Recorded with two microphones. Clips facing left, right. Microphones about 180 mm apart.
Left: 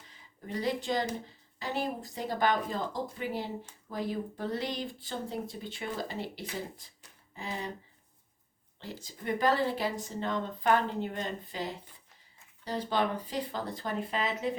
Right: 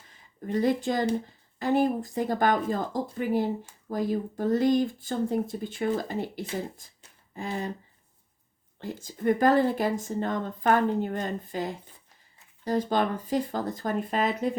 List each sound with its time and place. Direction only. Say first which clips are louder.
0.4 s speech: right 7 dB; 50° right (ahead or behind)
8.8 s speech: right 11 dB; 50° right (ahead or behind)